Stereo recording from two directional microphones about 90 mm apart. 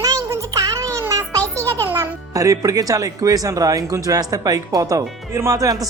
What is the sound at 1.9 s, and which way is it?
Music, 20° right (ahead or behind).